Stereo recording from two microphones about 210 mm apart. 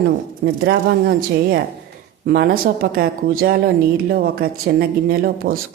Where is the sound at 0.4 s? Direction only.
50° right (ahead or behind).